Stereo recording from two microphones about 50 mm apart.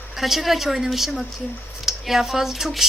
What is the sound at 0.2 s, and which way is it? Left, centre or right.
A woman's voice, centre.